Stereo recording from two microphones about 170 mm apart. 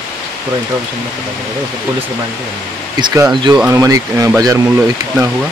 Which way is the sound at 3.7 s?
20° right (ahead or behind).